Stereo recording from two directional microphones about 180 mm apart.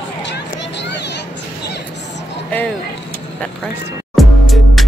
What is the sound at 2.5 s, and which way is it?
Vehicle, 10° left (ahead or behind).